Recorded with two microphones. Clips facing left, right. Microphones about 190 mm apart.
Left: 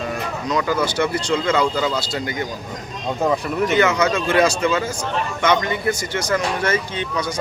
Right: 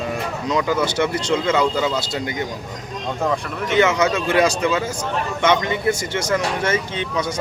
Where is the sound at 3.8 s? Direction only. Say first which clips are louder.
Right 4 dB; 25° right (ahead or behind).